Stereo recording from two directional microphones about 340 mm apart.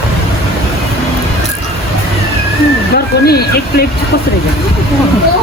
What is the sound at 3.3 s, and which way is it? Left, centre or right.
Speech, left.